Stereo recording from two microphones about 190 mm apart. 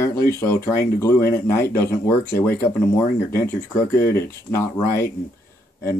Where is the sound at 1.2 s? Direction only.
50° left (ahead or behind).